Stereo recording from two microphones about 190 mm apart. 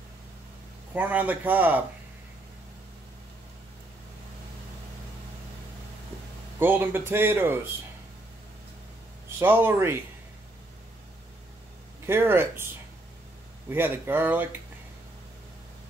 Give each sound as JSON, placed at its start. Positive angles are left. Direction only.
{"t": 0.9, "sound": "speech", "side_deg": -10}
{"t": 6.6, "sound": "speech", "side_deg": -10}
{"t": 9.4, "sound": "speech", "side_deg": -10}
{"t": 12.1, "sound": "speech", "side_deg": -10}
{"t": 13.7, "sound": "speech", "side_deg": -10}